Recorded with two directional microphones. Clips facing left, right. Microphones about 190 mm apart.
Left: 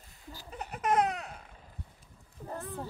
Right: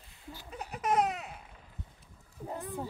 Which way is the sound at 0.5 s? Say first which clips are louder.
Left 1 dB; centre (ahead or behind).